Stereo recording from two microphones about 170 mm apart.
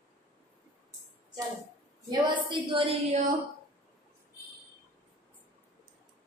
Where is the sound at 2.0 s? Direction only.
30° right (ahead or behind).